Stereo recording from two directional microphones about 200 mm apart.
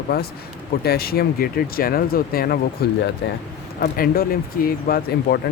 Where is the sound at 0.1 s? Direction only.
55° left (ahead or behind).